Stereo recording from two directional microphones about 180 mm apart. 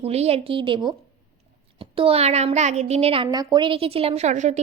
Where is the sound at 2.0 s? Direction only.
35° right (ahead or behind).